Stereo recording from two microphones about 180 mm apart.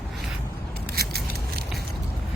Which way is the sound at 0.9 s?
60° right (ahead or behind).